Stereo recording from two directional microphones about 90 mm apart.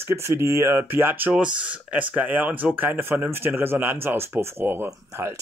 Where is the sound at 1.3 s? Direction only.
10° right (ahead or behind).